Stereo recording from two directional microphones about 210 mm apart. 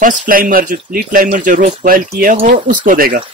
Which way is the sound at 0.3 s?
40° right (ahead or behind).